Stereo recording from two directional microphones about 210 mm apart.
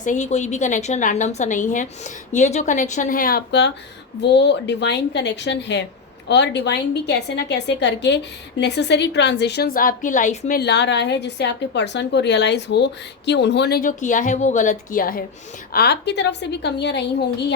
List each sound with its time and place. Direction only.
0.0 s a woman's voice: 35° left (ahead or behind)
10.6 s a woman's voice: 55° left (ahead or behind)